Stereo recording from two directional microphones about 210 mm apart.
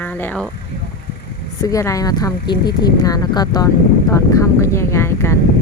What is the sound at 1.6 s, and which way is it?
Speech, 15° left (ahead or behind).